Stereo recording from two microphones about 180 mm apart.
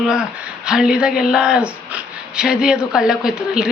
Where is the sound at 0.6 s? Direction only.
5° right (ahead or behind).